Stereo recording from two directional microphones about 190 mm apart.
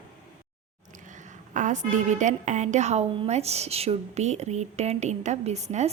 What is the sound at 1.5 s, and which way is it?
A woman's voice, 40° right (ahead or behind).